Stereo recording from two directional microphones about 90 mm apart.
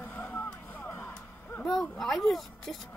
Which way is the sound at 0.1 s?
15° left (ahead or behind).